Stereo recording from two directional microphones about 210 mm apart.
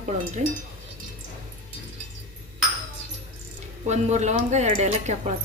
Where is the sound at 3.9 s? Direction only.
35° right (ahead or behind).